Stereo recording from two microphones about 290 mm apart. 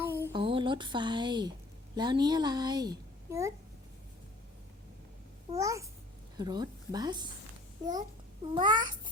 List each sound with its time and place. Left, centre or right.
0.0 s a sound: centre
2.0 s a child's voice: centre
5.5 s a child's voice: centre
8.5 s a child's voice: centre